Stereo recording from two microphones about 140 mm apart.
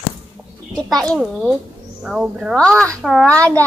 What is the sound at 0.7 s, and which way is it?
A child's voice, 5° left (ahead or behind).